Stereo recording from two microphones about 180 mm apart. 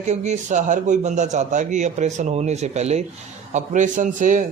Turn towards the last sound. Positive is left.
turn(degrees=-45)  # may be behind; listen again after turning